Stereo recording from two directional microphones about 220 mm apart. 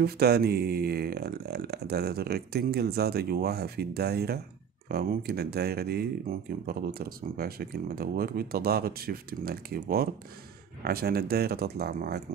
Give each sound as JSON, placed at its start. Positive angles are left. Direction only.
{"t": 0.0, "sound": "speech", "side_deg": -45}